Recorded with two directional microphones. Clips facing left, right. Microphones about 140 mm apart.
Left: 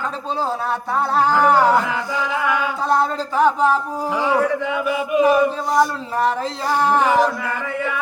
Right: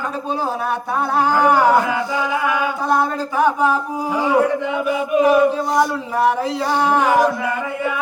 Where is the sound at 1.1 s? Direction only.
15° right (ahead or behind).